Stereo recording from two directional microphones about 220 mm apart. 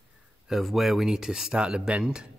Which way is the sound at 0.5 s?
Centre (ahead or behind).